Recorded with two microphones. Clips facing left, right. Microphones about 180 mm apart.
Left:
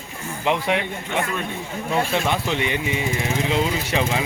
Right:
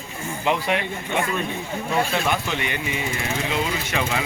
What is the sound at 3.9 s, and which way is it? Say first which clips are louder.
Speech: left 2 dB; 25° left (ahead or behind).